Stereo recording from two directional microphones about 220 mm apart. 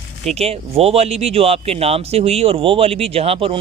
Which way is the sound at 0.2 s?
30° right (ahead or behind).